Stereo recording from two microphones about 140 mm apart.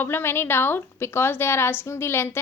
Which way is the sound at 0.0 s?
15° left (ahead or behind).